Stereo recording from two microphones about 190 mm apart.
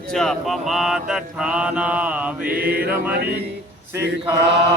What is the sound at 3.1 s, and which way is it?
Speech, 55° right (ahead or behind).